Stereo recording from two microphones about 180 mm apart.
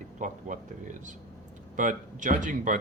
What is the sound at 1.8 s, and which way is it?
Speech, 45° right (ahead or behind).